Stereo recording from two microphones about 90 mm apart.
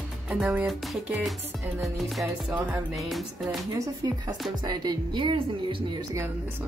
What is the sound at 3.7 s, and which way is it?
Speech, 40° right (ahead or behind).